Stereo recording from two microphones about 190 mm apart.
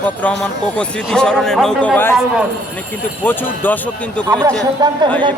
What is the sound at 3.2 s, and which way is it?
Speech, 10° left (ahead or behind).